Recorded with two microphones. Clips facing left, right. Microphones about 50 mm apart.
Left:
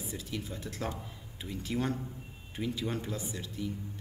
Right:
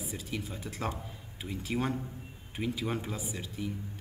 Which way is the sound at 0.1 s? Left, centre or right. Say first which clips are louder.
Left 1 dB; centre.